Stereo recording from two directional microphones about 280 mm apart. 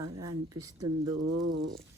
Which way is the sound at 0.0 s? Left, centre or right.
Right.